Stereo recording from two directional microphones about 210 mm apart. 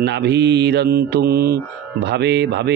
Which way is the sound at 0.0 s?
55° right (ahead or behind).